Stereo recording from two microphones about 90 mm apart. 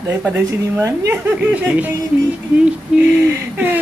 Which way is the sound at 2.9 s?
10° right (ahead or behind).